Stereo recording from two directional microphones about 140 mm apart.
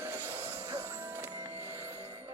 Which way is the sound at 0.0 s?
15° right (ahead or behind).